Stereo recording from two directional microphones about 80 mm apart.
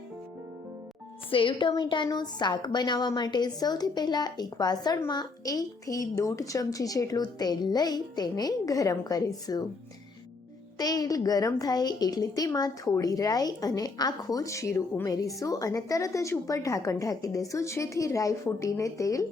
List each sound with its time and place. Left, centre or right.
1.3 s speech: left
1.7 s a woman's voice: left
10.8 s a child's voice: left
14.4 s a child's voice: left